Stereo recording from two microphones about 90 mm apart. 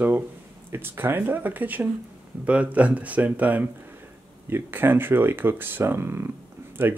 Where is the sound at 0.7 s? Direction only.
25° right (ahead or behind).